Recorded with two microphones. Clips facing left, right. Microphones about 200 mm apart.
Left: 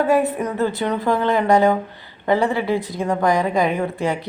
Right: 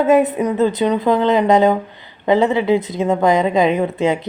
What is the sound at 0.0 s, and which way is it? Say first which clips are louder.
Speech: right 4 dB; 20° right (ahead or behind).